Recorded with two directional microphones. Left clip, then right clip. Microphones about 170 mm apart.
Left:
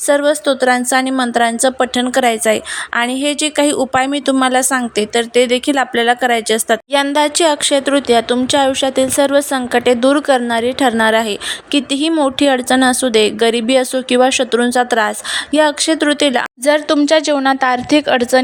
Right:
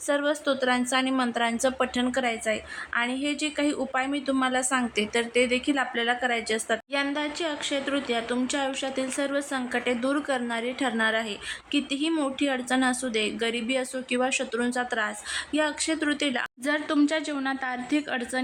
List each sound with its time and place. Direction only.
0.1 s a woman's voice: 45° left (ahead or behind); by 18.4 s 65° left (ahead or behind)